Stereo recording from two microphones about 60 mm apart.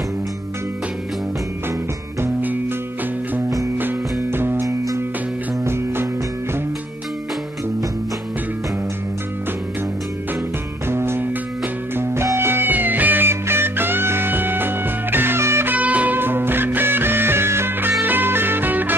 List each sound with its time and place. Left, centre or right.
3.7 s music: right
4.6 s music: right
5.6 s music: right
10.9 s music: right
15.7 s music: right
16.2 s music: right